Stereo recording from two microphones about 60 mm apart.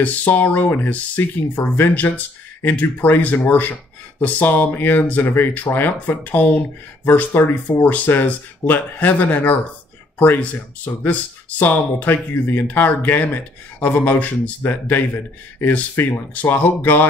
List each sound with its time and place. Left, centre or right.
0.0 s speech: left